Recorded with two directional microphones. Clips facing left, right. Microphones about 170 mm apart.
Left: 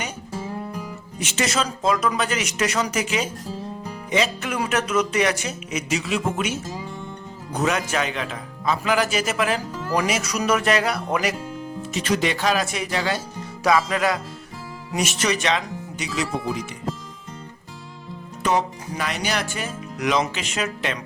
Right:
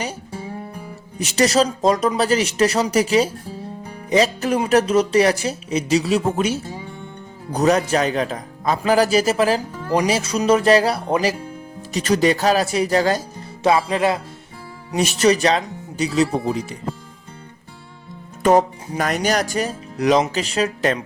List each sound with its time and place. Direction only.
1.2 s speech: 35° right (ahead or behind)
13.9 s speech: 25° right (ahead or behind)
18.4 s speech: 45° right (ahead or behind)